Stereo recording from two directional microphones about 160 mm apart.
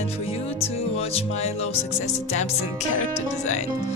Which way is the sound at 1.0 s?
40° left (ahead or behind).